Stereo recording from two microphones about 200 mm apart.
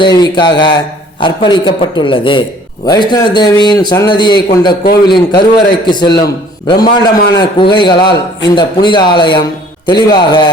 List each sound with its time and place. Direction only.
0.0 s a man's voice: 20° left (ahead or behind)